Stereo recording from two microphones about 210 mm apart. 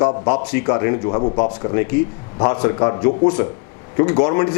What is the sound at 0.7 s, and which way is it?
Speech, 20° left (ahead or behind).